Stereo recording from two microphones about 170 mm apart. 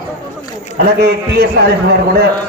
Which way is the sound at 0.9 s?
75° right (ahead or behind).